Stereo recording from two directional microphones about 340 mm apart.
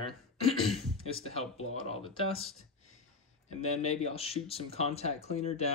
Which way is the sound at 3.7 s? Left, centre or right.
Centre.